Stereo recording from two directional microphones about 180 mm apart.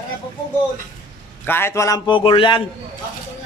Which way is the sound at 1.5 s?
15° left (ahead or behind).